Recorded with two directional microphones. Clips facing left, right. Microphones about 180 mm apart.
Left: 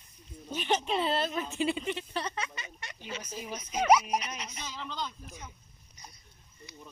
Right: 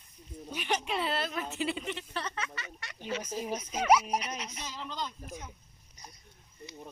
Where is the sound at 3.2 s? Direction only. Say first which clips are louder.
Right 5 dB; 45° right (ahead or behind).